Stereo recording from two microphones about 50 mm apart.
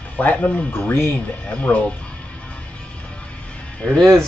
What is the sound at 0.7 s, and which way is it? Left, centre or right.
Speech, left.